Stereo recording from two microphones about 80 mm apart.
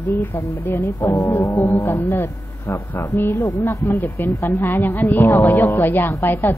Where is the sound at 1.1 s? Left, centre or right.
Left.